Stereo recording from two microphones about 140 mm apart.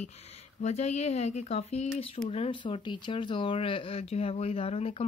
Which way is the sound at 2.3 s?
40° left (ahead or behind).